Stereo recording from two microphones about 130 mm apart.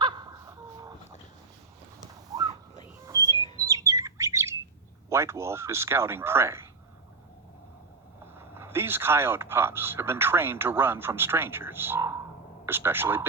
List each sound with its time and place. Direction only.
0.0 s crow: 35° right (ahead or behind)
3.2 s bird: 35° left (ahead or behind)
3.6 s bird: 25° right (ahead or behind)
5.0 s speech: 20° right (ahead or behind)
8.4 s speech: 20° right (ahead or behind)